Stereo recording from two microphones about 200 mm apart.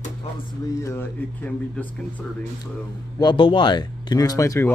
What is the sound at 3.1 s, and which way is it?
Speech, 25° left (ahead or behind).